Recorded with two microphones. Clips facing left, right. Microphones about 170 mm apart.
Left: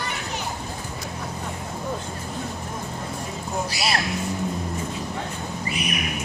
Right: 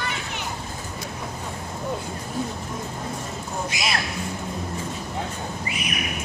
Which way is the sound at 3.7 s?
35° left (ahead or behind).